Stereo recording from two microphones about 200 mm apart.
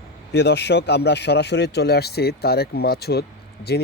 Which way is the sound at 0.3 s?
60° left (ahead or behind).